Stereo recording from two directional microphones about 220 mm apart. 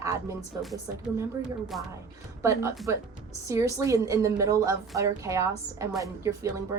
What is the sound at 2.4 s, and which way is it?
A woman's voice, 10° right (ahead or behind).